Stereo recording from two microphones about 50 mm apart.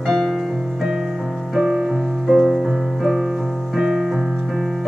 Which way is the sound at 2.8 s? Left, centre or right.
Centre.